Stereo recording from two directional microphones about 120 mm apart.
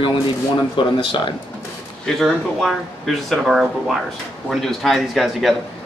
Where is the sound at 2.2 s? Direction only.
Centre (ahead or behind).